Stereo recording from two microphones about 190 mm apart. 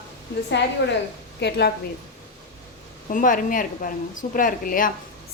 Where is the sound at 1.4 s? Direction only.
60° left (ahead or behind).